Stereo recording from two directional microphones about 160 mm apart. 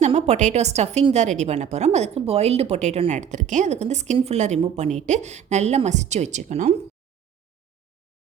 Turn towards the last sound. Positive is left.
turn(degrees=-45)  # may be behind; listen again after turning